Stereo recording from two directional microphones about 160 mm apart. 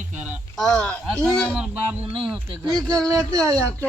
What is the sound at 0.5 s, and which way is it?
Speech, 5° left (ahead or behind).